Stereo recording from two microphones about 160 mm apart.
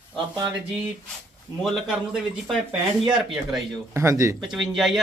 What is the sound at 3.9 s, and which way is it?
Speech, 20° right (ahead or behind).